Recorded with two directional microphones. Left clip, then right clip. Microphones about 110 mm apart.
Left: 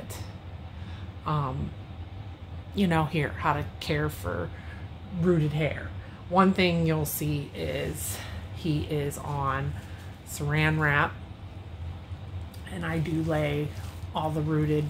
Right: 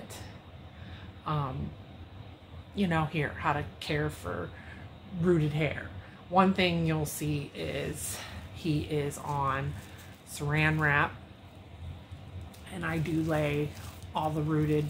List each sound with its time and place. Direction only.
1.2 s speech: 45° left (ahead or behind)
2.7 s speech: 55° left (ahead or behind)
5.2 s speech: 10° left (ahead or behind)
6.3 s speech: 35° left (ahead or behind); by 10.6 s 20° left (ahead or behind)
10.6 s speech: 30° left (ahead or behind)
12.8 s speech: 10° left (ahead or behind)